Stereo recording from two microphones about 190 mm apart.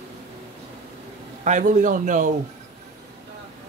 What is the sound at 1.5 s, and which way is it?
Speech, 40° right (ahead or behind).